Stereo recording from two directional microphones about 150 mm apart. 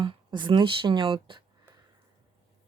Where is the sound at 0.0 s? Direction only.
30° right (ahead or behind).